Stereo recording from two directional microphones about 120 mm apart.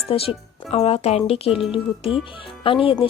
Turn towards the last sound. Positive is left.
turn(degrees=50)  # may be behind; listen again after turning